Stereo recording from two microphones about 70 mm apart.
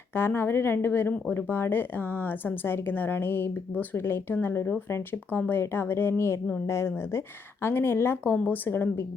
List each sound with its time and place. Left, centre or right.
0.1 s speech: left